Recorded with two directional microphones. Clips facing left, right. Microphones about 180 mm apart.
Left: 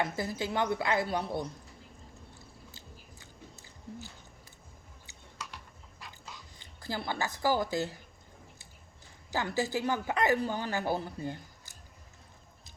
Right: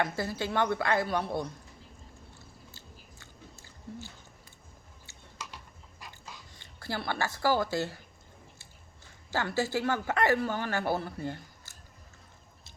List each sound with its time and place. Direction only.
0.0 s a woman's voice: 20° left (ahead or behind)
2.7 s biting: 15° left (ahead or behind)
6.7 s speech: 15° left (ahead or behind)
9.3 s speech: 15° left (ahead or behind)